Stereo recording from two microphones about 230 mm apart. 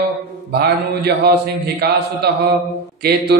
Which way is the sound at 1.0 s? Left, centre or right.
Right.